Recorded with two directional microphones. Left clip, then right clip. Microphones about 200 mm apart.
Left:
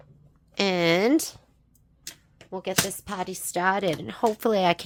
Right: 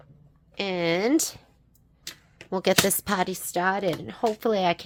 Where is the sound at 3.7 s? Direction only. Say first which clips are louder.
Left 1 dB; 20° left (ahead or behind).